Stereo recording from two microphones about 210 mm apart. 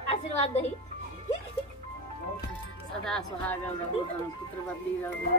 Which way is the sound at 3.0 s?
5° left (ahead or behind).